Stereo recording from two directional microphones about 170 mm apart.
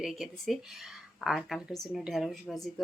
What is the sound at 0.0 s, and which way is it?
A woman's voice, centre (ahead or behind).